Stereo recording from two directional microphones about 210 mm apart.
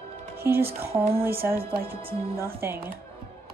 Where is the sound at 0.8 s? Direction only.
10° right (ahead or behind).